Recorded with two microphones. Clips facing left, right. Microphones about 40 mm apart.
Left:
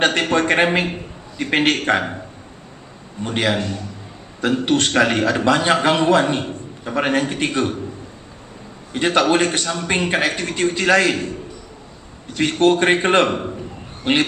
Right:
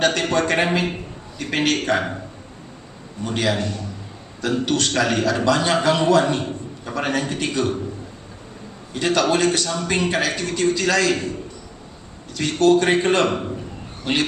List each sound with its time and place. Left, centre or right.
0.0 s a man's voice: left
3.2 s a man's voice: left
8.9 s a man's voice: left
12.3 s a man's voice: left